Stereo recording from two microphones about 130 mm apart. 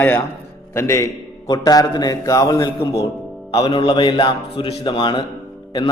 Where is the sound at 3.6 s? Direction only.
35° left (ahead or behind).